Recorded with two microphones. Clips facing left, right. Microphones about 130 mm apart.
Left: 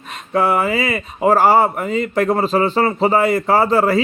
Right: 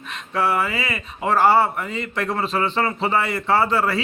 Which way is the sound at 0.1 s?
45° left (ahead or behind).